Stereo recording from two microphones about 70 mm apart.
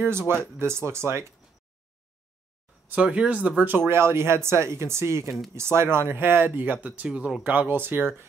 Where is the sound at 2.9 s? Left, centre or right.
Centre.